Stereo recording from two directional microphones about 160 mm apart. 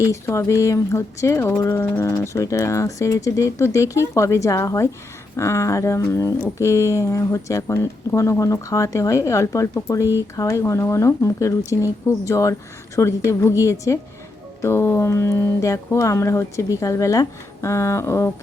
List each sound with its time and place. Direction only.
0.0 s speech: 20° left (ahead or behind)